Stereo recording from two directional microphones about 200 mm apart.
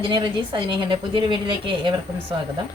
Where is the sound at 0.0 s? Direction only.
25° right (ahead or behind).